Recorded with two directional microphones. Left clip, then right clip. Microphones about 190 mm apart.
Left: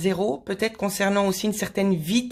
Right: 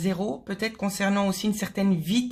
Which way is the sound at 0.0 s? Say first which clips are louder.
Left 6 dB; 35° left (ahead or behind).